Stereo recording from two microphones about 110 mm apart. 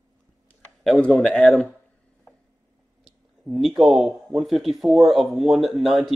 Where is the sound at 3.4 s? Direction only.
Centre (ahead or behind).